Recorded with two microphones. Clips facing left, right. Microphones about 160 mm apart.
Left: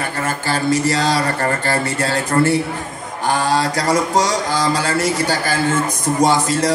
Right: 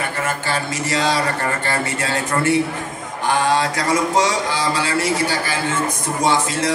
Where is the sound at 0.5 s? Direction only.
35° left (ahead or behind).